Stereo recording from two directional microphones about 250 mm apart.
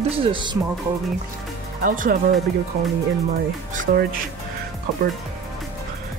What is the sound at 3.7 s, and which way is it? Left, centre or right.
Speech, right.